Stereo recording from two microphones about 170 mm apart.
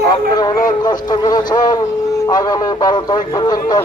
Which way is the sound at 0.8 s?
25° left (ahead or behind).